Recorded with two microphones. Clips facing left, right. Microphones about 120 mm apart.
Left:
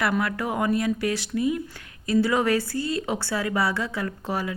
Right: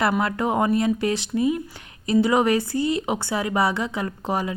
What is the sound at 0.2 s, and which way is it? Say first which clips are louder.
Speech: right 4 dB; 25° right (ahead or behind).